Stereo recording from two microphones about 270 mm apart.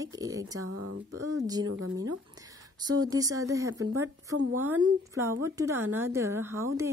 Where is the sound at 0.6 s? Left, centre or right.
Right.